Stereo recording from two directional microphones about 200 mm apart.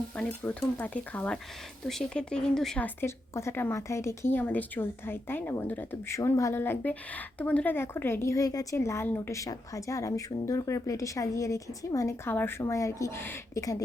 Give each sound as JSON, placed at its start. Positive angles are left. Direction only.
{"t": 0.2, "sound": "a woman's voice", "side_deg": 10}